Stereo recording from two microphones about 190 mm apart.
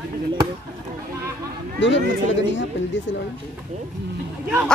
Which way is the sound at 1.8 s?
75° left (ahead or behind).